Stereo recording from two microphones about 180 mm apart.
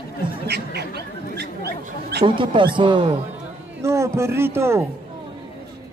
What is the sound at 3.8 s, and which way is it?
A man's voice, 15° right (ahead or behind).